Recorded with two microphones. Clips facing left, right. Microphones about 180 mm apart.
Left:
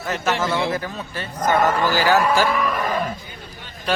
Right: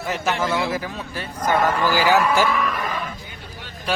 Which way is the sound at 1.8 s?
45° left (ahead or behind).